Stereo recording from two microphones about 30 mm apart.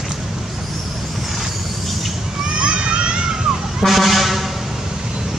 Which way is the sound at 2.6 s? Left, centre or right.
Right.